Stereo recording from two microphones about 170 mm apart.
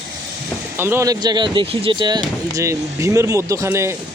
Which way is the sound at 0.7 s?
15° right (ahead or behind).